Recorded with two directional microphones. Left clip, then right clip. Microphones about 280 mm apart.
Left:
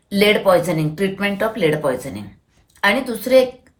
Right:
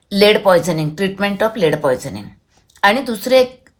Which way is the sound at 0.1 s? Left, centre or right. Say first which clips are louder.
Right 3 dB; centre.